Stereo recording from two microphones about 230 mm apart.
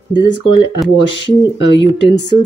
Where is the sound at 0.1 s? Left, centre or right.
Centre.